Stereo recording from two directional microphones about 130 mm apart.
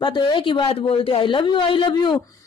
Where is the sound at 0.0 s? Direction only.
35° left (ahead or behind).